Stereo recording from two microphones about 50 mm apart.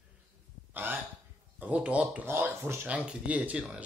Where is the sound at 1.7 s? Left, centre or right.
Right.